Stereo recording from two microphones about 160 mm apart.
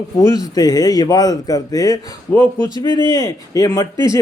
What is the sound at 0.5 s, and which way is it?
A man's voice, 25° left (ahead or behind).